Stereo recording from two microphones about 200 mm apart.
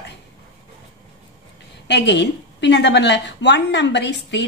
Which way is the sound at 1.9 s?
60° left (ahead or behind).